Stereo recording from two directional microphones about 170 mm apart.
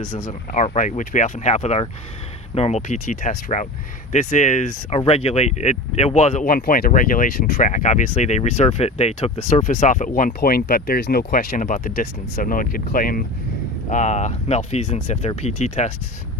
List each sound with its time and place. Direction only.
0.3 s speech: 45° left (ahead or behind)
6.5 s speech: 55° left (ahead or behind)
13.9 s speech: 45° left (ahead or behind)